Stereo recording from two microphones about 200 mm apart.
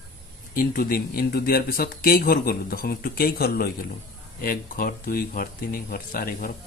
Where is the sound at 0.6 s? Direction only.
45° left (ahead or behind).